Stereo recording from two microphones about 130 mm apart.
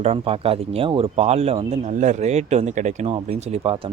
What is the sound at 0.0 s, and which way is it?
Speech, 50° right (ahead or behind).